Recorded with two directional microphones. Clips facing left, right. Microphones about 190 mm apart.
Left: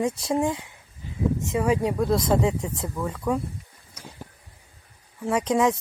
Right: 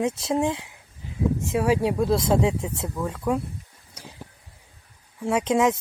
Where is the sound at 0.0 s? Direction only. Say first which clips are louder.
Even; 5° right (ahead or behind).